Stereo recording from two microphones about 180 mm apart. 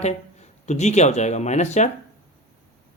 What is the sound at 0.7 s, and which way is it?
Speech, 40° left (ahead or behind).